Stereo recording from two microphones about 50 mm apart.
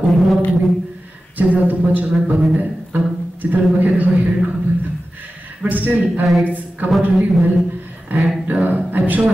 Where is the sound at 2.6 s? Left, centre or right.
Right.